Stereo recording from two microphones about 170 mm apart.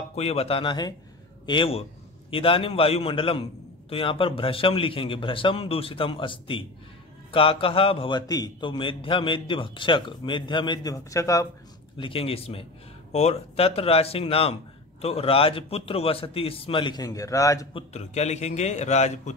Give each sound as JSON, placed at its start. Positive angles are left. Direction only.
{"t": 0.1, "sound": "a man's voice", "side_deg": 35}
{"t": 12.0, "sound": "a man's voice", "side_deg": 35}
{"t": 17.7, "sound": "a man's voice", "side_deg": 40}